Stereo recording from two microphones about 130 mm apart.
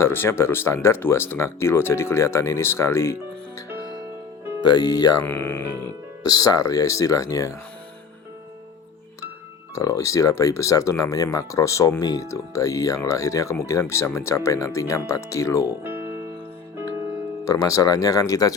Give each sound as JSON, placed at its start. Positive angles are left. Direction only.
{"t": 0.0, "sound": "speech", "side_deg": 20}
{"t": 4.6, "sound": "speech", "side_deg": 30}
{"t": 5.2, "sound": "speech", "side_deg": 15}
{"t": 6.2, "sound": "speech", "side_deg": 30}
{"t": 9.7, "sound": "speech", "side_deg": 25}
{"t": 15.6, "sound": "music", "side_deg": -20}
{"t": 17.4, "sound": "speech", "side_deg": 25}